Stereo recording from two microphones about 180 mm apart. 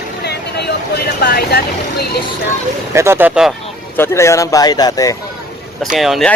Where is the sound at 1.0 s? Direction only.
60° left (ahead or behind).